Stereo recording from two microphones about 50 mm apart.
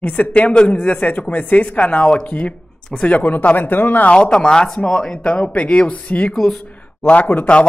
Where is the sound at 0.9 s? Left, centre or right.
Left.